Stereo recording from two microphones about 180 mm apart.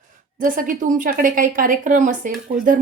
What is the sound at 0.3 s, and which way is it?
A woman's voice, 50° right (ahead or behind).